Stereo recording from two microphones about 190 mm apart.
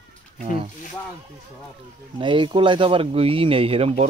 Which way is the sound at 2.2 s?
25° right (ahead or behind).